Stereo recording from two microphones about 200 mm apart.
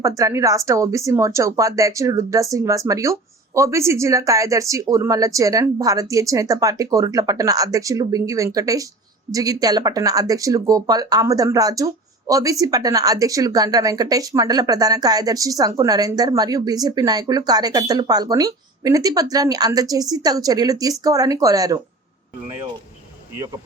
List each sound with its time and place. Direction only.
0.0 s a woman's voice: 15° right (ahead or behind)